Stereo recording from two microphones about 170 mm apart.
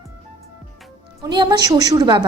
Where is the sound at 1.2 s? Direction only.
25° right (ahead or behind).